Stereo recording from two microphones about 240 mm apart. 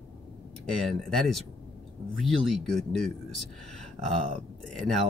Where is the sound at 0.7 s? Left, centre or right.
Centre.